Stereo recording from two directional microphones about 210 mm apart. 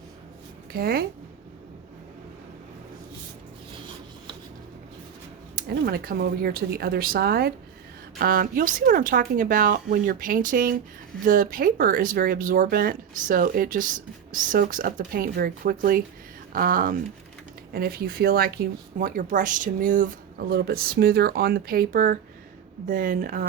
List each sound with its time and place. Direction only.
0.7 s speech: 45° right (ahead or behind)
5.5 s speech: 45° right (ahead or behind)